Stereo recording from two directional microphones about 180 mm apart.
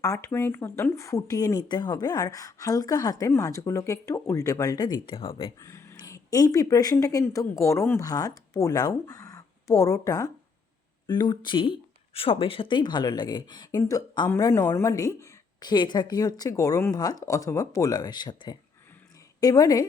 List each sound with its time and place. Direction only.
0.0 s speech: 15° left (ahead or behind)